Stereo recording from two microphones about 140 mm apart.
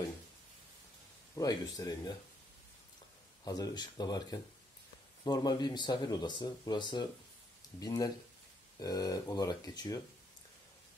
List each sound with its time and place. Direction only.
1.3 s speech: 25° left (ahead or behind)
3.4 s speech: 25° left (ahead or behind)